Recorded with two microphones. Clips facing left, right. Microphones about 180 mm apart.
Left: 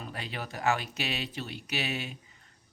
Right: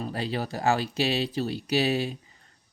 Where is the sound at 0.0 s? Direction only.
35° right (ahead or behind).